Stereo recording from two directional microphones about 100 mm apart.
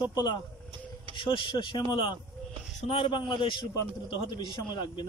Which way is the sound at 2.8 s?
75° left (ahead or behind).